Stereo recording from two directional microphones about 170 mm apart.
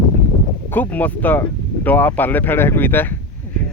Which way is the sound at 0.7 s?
10° left (ahead or behind).